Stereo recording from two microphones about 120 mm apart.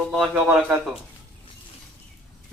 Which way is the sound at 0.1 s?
5° right (ahead or behind).